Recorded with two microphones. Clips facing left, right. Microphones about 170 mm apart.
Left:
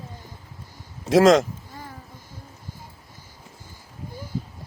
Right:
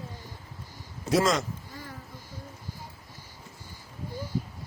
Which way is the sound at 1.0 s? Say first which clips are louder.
Left 9 dB; 90° left.